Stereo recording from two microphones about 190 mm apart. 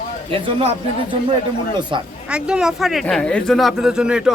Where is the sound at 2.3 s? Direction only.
5° right (ahead or behind).